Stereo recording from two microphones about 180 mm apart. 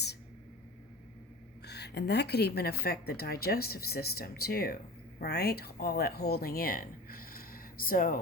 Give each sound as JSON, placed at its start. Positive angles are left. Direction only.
{"t": 1.6, "sound": "a woman's voice", "side_deg": 65}